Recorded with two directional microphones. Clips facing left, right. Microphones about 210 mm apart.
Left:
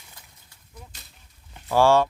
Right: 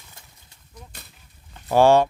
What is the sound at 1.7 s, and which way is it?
Speech, 20° right (ahead or behind).